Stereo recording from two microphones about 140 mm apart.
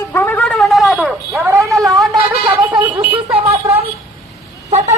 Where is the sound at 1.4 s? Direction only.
20° right (ahead or behind).